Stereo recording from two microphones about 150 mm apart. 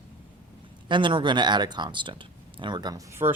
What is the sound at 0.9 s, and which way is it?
Speech, 35° right (ahead or behind).